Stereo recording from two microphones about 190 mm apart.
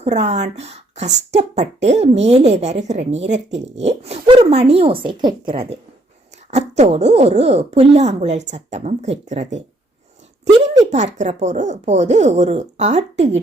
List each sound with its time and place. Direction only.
0.0 s a woman's voice: 35° right (ahead or behind)
6.5 s hoot: 35° right (ahead or behind)
6.9 s a woman's voice: 35° right (ahead or behind)
10.8 s a woman's voice: 40° right (ahead or behind)